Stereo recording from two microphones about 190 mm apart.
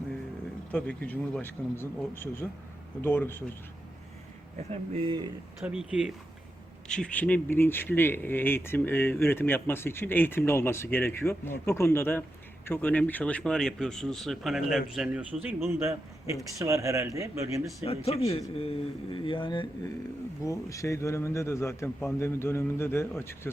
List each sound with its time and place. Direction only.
0.7 s speech: 5° left (ahead or behind)
4.5 s speech: 35° right (ahead or behind)
5.6 s speech: 5° right (ahead or behind)
17.8 s speech: 30° left (ahead or behind); by 23.0 s 15° left (ahead or behind)